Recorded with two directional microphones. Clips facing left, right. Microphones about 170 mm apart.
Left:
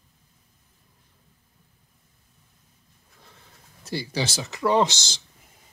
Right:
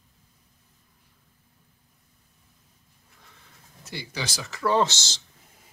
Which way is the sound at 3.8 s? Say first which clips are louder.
Left 6 dB; 35° left (ahead or behind).